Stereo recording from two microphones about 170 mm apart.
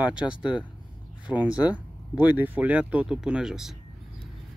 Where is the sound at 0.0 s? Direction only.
5° right (ahead or behind).